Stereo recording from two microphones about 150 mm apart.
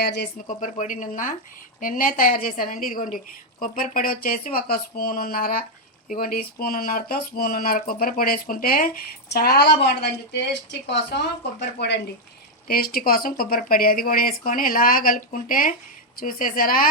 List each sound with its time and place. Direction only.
0.0 s speech: 90° left; by 8.9 s 70° left (ahead or behind)
9.3 s a woman's voice: 90° left
12.6 s speech: 80° left